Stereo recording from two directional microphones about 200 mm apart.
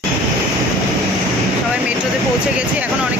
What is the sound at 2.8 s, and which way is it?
Speech, 5° right (ahead or behind).